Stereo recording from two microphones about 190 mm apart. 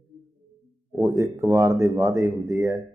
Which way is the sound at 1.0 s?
15° right (ahead or behind).